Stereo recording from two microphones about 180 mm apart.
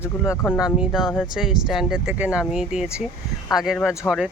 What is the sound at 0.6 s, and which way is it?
Speech, 5° right (ahead or behind).